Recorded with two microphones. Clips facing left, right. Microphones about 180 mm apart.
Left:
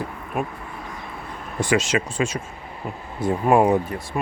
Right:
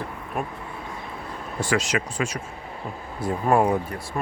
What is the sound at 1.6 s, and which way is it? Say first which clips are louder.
Speech: left 3 dB; 20° left (ahead or behind).